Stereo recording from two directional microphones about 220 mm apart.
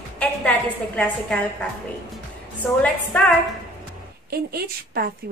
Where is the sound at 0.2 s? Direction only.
5° left (ahead or behind).